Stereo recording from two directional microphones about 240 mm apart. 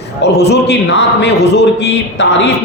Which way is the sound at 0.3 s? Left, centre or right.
Left.